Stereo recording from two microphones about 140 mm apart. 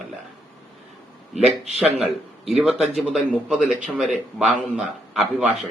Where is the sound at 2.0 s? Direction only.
5° right (ahead or behind).